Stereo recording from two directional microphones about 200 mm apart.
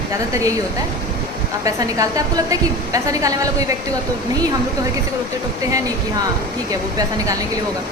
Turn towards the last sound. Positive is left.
turn(degrees=-20)  # may be behind; listen again after turning